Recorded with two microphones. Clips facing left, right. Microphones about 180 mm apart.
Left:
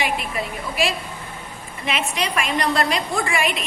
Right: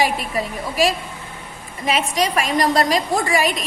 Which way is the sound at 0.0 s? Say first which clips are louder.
Right 4 dB; 40° right (ahead or behind).